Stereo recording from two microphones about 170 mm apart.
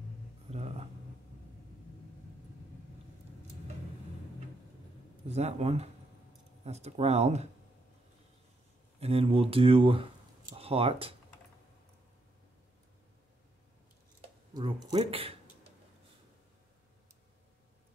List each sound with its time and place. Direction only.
0.5 s a sound: 35° right (ahead or behind)
5.3 s speech: 40° right (ahead or behind)
9.0 s speech: 35° right (ahead or behind)
14.5 s speech: 25° right (ahead or behind)